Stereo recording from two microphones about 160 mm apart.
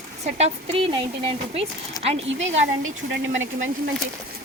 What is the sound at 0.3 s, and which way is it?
Speech, 40° right (ahead or behind).